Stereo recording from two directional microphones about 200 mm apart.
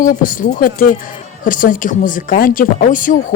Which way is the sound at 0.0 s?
40° left (ahead or behind).